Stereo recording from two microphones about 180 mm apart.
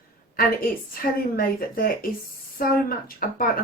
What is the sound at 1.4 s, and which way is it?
Speech, 55° left (ahead or behind).